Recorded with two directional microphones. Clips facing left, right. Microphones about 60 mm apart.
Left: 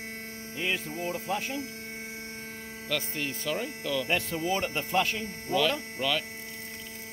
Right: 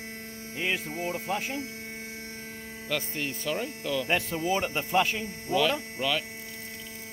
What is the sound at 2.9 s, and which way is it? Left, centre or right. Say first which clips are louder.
Speech: right 1 dB; centre.